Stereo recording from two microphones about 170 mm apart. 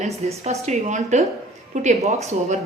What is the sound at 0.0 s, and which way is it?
Speech, 40° right (ahead or behind).